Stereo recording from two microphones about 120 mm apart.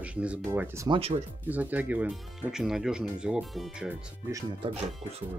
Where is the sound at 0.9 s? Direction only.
55° right (ahead or behind).